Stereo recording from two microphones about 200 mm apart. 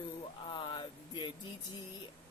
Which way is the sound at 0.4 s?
25° left (ahead or behind).